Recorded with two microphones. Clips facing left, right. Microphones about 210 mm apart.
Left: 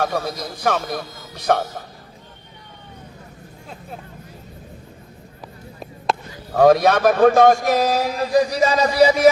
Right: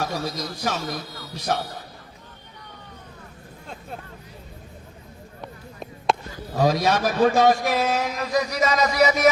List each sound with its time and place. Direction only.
0.0 s a man's voice: 55° left (ahead or behind)
3.7 s speech: centre (ahead or behind)
6.1 s a sound: centre (ahead or behind)
6.5 s a man's voice: 55° left (ahead or behind); by 9.3 s 30° left (ahead or behind)